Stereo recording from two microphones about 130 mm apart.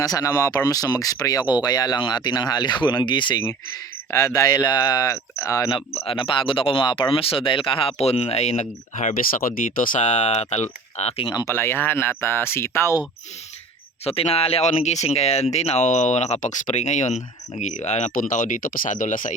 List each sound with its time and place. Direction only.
0.0 s speech: 25° left (ahead or behind)
4.1 s speech: 25° left (ahead or behind)
5.7 s speech: 50° left (ahead or behind)
11.3 s speech: 30° left (ahead or behind)
11.5 s speech: 20° left (ahead or behind)
14.0 s speech: 50° left (ahead or behind); by 19.3 s 85° left